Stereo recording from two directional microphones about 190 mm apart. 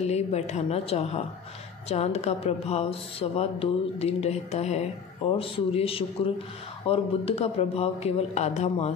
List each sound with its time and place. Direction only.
0.0 s a woman's voice: 35° left (ahead or behind)